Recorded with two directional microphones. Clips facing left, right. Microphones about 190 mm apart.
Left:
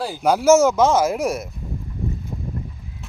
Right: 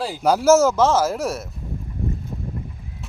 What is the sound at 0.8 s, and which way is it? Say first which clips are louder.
Speech: left 1 dB; 10° left (ahead or behind).